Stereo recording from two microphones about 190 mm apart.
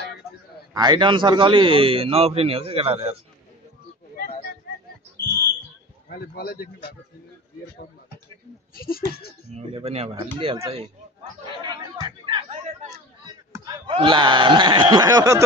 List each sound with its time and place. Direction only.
0.7 s a man's voice: 20° right (ahead or behind)
6.0 s speech: 55° left (ahead or behind)
8.7 s speech: 50° left (ahead or behind)
9.5 s a man's voice: 35° right (ahead or behind)
11.6 s chatter: 25° right (ahead or behind)
13.2 s speech: 20° right (ahead or behind)